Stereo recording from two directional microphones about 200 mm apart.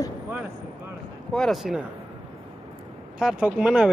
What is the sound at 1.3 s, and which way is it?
Speech, centre (ahead or behind).